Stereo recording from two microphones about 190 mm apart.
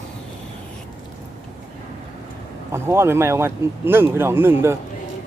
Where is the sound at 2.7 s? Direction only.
15° right (ahead or behind).